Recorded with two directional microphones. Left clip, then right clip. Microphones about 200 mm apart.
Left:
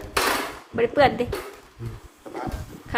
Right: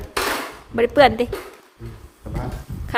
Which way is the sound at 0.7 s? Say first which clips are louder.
Right 5 dB; 45° right (ahead or behind).